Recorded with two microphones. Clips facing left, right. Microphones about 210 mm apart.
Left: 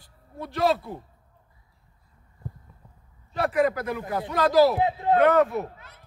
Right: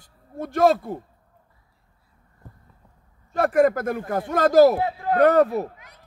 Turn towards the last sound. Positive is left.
turn(degrees=-15)  # may be behind; listen again after turning